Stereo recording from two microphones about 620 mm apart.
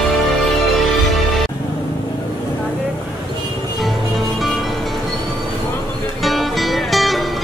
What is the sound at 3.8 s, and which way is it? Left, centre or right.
Music, centre.